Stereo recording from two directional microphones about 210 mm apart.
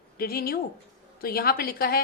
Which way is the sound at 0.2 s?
45° left (ahead or behind).